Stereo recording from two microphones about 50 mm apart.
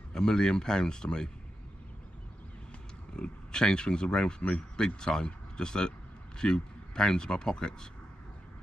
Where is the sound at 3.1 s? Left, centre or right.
Centre.